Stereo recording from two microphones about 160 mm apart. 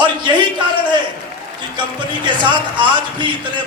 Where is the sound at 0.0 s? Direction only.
30° right (ahead or behind).